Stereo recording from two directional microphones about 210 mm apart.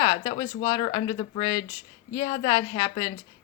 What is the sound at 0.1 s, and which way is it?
Speech, 20° left (ahead or behind).